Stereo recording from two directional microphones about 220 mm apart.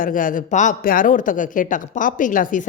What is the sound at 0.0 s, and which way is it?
Speech, 40° left (ahead or behind).